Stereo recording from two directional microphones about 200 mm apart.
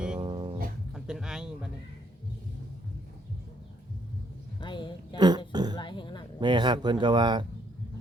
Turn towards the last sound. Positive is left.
turn(degrees=-20)  # may be behind; listen again after turning